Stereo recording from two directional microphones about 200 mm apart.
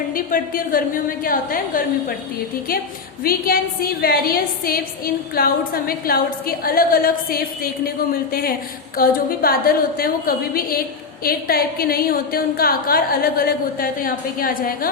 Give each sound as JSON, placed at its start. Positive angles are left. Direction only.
{"t": 0.1, "sound": "a woman's voice", "side_deg": 45}
{"t": 3.2, "sound": "a woman's voice", "side_deg": 50}